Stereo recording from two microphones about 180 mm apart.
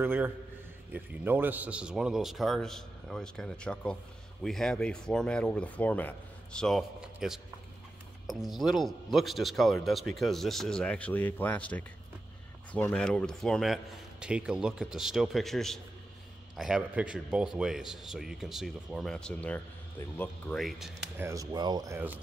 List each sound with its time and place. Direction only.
0.0 s a man's voice: 10° right (ahead or behind)
8.5 s a man's voice: centre (ahead or behind)
21.2 s speech: 15° right (ahead or behind)